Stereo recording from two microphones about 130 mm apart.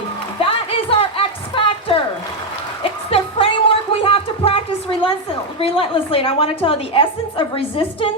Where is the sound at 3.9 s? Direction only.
45° left (ahead or behind).